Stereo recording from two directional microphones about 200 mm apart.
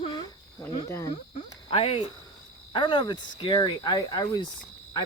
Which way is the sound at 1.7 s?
30° left (ahead or behind).